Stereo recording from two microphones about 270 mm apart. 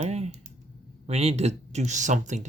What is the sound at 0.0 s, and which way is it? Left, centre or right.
Typing, right.